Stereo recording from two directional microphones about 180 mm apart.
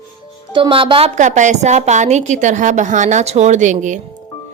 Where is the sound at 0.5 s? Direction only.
30° right (ahead or behind).